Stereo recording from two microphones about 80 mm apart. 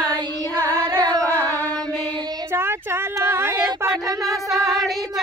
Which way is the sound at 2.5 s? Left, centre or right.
Right.